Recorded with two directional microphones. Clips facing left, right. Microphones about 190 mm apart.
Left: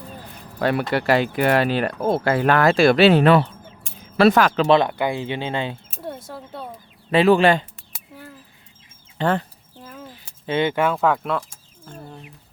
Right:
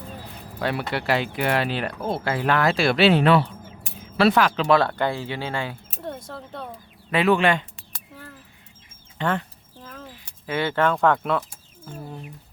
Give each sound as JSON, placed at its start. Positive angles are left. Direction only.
{"t": 0.6, "sound": "speech", "side_deg": 50}
{"t": 4.6, "sound": "speech", "side_deg": 20}
{"t": 6.0, "sound": "speech", "side_deg": 10}
{"t": 7.1, "sound": "speech", "side_deg": 30}
{"t": 7.8, "sound": "a sound", "side_deg": 10}
{"t": 9.1, "sound": "speech", "side_deg": 35}
{"t": 10.4, "sound": "speech", "side_deg": 20}
{"t": 11.9, "sound": "a sound", "side_deg": -5}